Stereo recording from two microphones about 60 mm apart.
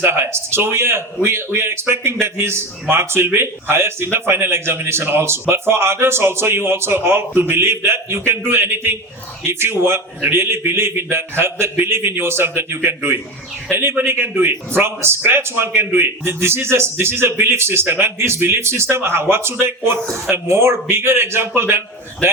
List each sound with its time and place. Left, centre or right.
0.0 s a man's voice: right